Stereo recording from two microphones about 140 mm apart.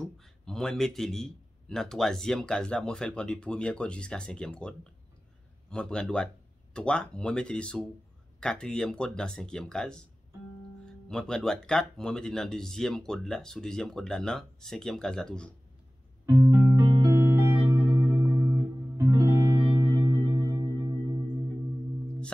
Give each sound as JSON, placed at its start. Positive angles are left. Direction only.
{"t": 0.2, "sound": "a man's voice", "side_deg": 5}
{"t": 11.1, "sound": "a man's voice", "side_deg": 5}
{"t": 16.4, "sound": "music", "side_deg": -25}